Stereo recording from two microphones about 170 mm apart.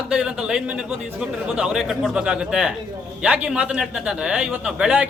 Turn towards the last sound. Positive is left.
turn(degrees=-5)  # may be behind; listen again after turning